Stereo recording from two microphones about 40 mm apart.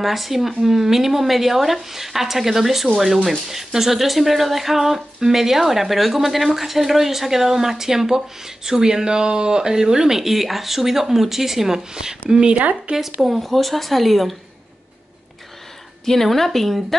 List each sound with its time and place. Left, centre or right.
0.0 s speech: centre; by 12.5 s right
12.5 s speech: right
12.9 s speech: centre
13.5 s speech: centre
16.1 s speech: centre